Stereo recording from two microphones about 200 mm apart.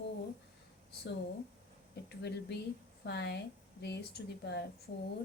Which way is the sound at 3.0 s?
55° left (ahead or behind).